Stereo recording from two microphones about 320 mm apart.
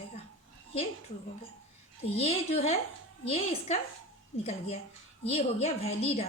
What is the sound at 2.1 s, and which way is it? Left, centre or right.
A woman's voice, centre.